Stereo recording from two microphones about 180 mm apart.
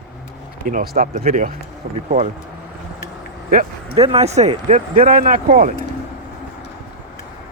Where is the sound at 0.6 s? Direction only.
50° right (ahead or behind).